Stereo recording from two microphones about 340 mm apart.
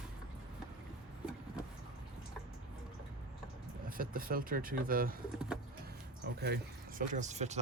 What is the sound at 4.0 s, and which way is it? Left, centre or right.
Speech, right.